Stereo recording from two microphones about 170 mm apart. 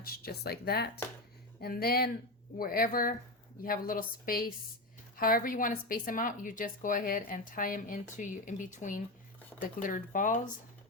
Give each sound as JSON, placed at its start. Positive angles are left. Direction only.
{"t": 0.0, "sound": "a woman's voice", "side_deg": 60}